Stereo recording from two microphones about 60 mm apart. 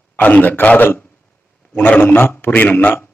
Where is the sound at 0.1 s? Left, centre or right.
Left.